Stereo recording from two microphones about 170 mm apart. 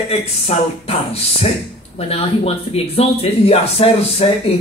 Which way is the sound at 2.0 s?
35° left (ahead or behind).